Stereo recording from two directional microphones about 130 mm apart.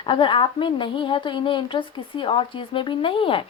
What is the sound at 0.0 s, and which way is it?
A woman's voice, 40° left (ahead or behind).